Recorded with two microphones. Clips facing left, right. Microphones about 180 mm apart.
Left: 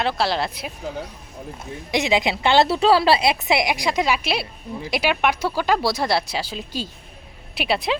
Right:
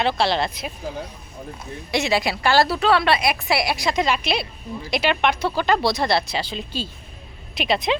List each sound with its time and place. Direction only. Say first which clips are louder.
0.0 s speech: right 1 dB; centre (ahead or behind)
1.9 s a woman's voice: left 1 dB; 15° left (ahead or behind)